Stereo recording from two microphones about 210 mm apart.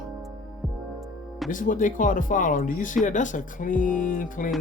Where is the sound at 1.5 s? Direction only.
40° left (ahead or behind).